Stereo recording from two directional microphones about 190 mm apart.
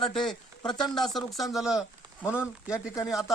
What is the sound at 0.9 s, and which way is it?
Speech, centre (ahead or behind).